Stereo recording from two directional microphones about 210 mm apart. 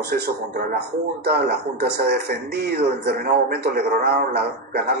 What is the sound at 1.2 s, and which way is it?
Speech, 50° right (ahead or behind).